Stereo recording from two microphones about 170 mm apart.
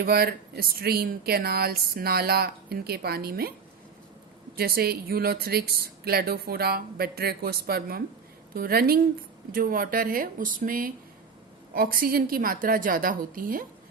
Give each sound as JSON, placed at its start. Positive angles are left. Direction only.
{"t": 0.0, "sound": "speech", "side_deg": -65}
{"t": 4.5, "sound": "speech", "side_deg": -65}